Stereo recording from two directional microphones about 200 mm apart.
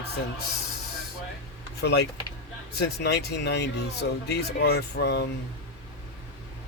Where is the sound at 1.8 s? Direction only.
55° left (ahead or behind).